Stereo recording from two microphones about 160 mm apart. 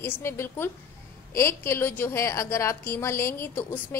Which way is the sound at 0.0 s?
15° left (ahead or behind).